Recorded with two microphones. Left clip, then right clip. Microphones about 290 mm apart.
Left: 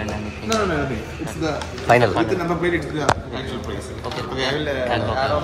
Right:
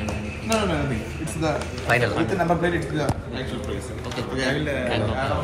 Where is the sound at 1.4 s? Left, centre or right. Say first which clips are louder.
Left 3 dB; centre.